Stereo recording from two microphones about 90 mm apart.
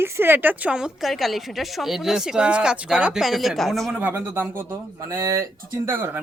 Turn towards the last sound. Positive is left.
turn(degrees=-25)  # may be behind; listen again after turning